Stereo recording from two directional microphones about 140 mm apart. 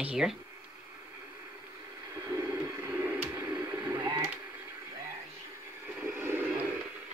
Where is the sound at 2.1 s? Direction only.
20° right (ahead or behind).